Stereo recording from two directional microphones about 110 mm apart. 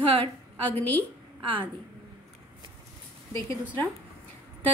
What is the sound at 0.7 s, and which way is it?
Speech, 15° left (ahead or behind).